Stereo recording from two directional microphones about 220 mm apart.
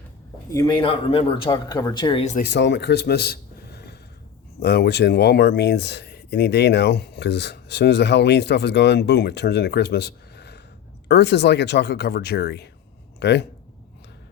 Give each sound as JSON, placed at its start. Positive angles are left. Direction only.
{"t": 0.5, "sound": "speech", "side_deg": 20}
{"t": 2.4, "sound": "a man's voice", "side_deg": 50}